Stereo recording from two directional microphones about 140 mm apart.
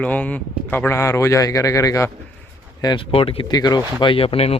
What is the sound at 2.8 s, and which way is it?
Speech, 35° left (ahead or behind).